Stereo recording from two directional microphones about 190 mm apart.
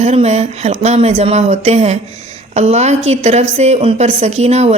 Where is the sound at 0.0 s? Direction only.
35° right (ahead or behind).